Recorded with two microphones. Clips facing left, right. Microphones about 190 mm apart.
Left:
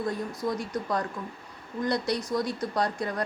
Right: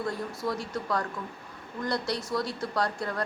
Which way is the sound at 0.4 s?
20° left (ahead or behind).